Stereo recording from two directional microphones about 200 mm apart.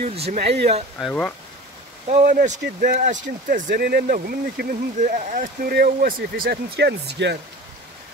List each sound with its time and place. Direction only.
0.0 s speech: 30° right (ahead or behind)
0.9 s speech: 5° left (ahead or behind)
2.0 s speech: 40° right (ahead or behind)
2.6 s speech: 50° right (ahead or behind)